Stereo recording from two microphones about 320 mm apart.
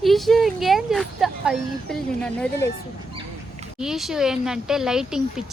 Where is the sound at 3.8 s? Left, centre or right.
Centre.